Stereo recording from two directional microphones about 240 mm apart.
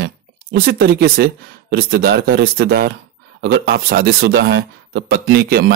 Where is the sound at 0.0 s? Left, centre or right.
Right.